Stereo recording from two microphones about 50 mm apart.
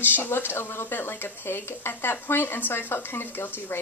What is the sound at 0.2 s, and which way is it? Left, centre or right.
Speech, left.